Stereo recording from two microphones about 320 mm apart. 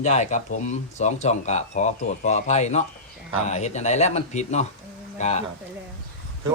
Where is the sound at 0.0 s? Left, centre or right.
Left.